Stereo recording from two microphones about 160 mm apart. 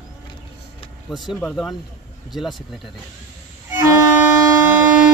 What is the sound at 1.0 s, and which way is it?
Speech, centre (ahead or behind).